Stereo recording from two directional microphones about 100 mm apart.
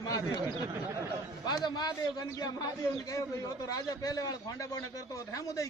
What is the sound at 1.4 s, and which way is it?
A man's voice, 45° left (ahead or behind).